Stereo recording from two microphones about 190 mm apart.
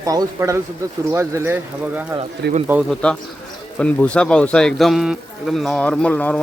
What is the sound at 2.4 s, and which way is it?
Speech, 60° right (ahead or behind).